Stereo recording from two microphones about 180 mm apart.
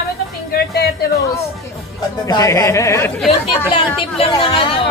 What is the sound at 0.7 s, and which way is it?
Speech, 65° left (ahead or behind).